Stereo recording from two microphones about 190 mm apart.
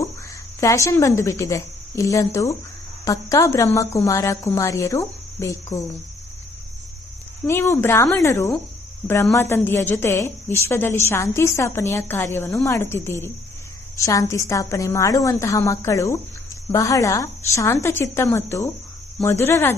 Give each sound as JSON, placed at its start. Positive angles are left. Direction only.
{"t": 0.6, "sound": "a woman's voice", "side_deg": 15}
{"t": 7.4, "sound": "a woman's voice", "side_deg": 10}